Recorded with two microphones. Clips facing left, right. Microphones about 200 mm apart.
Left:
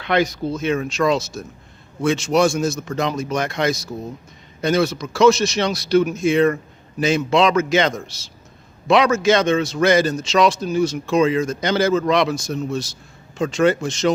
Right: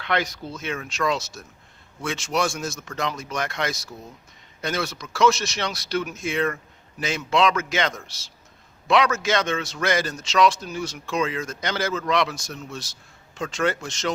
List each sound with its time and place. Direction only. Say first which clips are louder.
0.0 s speech: left 7 dB; 15° left (ahead or behind)
0.5 s a man's voice: left 8 dB; 25° left (ahead or behind)